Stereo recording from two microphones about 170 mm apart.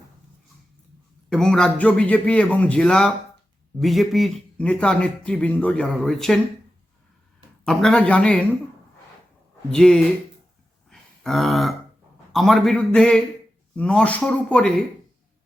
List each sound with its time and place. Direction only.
1.3 s a man's voice: 5° left (ahead or behind)
7.6 s a man's voice: 5° left (ahead or behind)
9.7 s speech: 5° left (ahead or behind)
10.8 s grunt: centre (ahead or behind)
12.3 s a man's voice: centre (ahead or behind)